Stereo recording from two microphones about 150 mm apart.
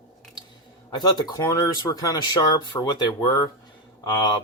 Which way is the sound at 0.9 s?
25° left (ahead or behind).